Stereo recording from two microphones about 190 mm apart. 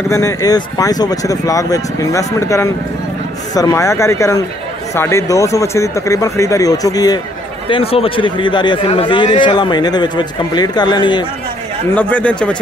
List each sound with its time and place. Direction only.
0.1 s speech: 15° left (ahead or behind)
7.7 s a man's voice: 30° left (ahead or behind)
11.9 s speech: 10° left (ahead or behind)